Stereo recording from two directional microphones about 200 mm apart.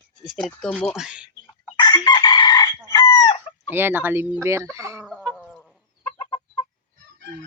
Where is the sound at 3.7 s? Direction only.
10° right (ahead or behind).